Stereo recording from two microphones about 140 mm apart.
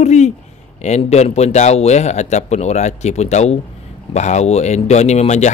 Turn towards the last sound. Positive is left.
turn(degrees=55)  # may be behind; listen again after turning